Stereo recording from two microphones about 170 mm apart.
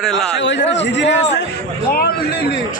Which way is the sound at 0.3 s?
90° left.